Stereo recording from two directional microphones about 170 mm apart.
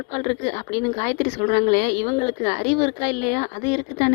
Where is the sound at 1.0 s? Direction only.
35° left (ahead or behind).